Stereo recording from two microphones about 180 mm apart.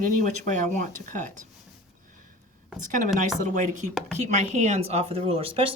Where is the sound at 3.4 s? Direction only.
45° right (ahead or behind).